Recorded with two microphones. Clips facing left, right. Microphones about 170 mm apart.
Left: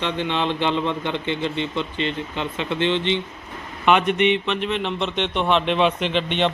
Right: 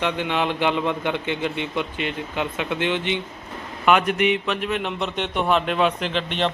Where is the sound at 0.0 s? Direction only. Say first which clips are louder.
Even; 10° right (ahead or behind).